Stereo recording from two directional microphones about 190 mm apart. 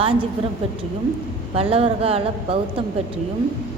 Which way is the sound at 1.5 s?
30° right (ahead or behind).